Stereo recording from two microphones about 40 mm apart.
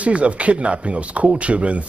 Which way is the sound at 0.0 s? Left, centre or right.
Right.